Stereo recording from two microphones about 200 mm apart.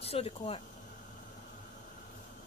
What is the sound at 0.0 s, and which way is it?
Speech, 30° left (ahead or behind).